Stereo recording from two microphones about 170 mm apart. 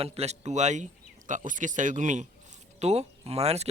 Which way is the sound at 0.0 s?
35° right (ahead or behind).